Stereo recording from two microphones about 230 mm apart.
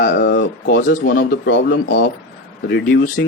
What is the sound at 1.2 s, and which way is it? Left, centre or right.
Speech, left.